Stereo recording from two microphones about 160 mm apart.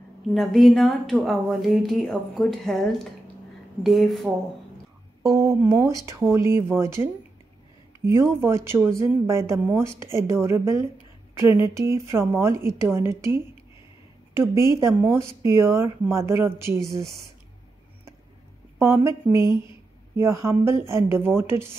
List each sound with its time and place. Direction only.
0.3 s speech: centre (ahead or behind)
5.2 s speech: 20° right (ahead or behind)
18.8 s speech: 15° right (ahead or behind)